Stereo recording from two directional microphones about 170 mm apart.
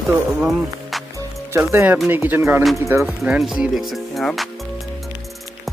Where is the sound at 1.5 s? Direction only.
15° right (ahead or behind); by 4.5 s centre (ahead or behind).